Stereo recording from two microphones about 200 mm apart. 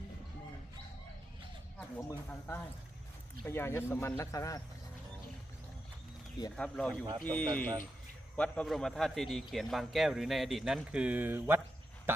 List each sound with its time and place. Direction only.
2.0 s speech: 15° left (ahead or behind)
6.6 s a man's voice: 5° left (ahead or behind); by 11.6 s 10° right (ahead or behind)
12.1 s a sound: 10° right (ahead or behind)